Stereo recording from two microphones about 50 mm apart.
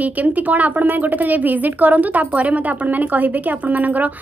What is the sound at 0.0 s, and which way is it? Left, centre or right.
A woman's voice, right.